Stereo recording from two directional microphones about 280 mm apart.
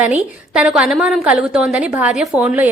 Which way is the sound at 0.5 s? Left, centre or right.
Centre.